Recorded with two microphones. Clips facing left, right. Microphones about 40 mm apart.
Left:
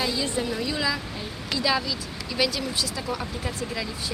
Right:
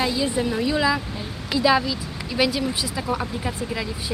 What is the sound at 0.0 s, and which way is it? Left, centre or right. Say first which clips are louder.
Speech: right 4 dB; centre.